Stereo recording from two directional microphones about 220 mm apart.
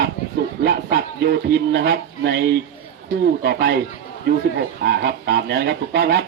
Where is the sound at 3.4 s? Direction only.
50° right (ahead or behind).